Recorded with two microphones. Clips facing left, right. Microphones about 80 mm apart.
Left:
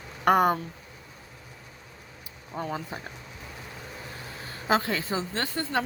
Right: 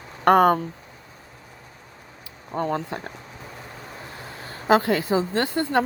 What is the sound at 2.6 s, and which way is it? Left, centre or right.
Speech, right.